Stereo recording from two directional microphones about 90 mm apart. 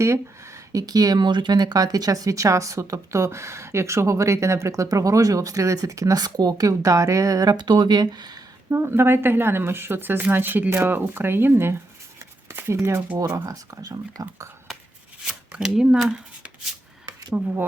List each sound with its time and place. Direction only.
0.0 s speech: 35° right (ahead or behind)
7.5 s speech: 55° right (ahead or behind)
8.7 s speech: 25° right (ahead or behind)
12.5 s a sound: 25° right (ahead or behind)
13.1 s speech: 40° right (ahead or behind)
15.2 s speech: 10° right (ahead or behind)